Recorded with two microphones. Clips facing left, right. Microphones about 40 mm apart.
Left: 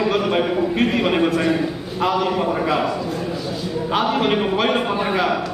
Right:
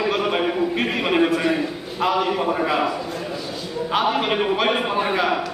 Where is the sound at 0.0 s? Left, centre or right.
Centre.